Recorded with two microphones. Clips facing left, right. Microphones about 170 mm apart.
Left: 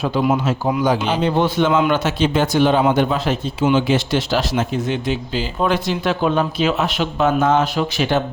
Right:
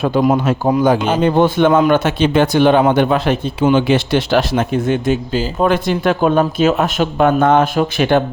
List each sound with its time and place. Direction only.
0.0 s a man's voice: 45° right (ahead or behind)